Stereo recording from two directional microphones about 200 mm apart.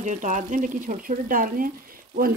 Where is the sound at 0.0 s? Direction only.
40° right (ahead or behind).